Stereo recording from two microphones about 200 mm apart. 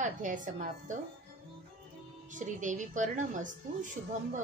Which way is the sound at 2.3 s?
40° right (ahead or behind).